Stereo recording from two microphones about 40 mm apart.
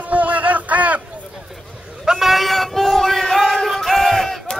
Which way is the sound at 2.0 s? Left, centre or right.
Centre.